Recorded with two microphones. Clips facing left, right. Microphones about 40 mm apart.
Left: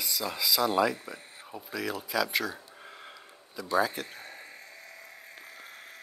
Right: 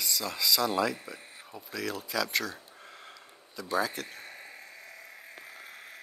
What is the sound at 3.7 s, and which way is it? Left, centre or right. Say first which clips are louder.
Speech: left 3 dB; centre.